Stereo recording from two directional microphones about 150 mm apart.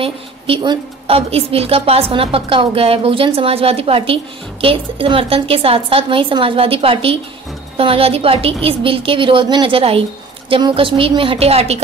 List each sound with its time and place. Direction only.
0.0 s a woman's voice: 40° right (ahead or behind)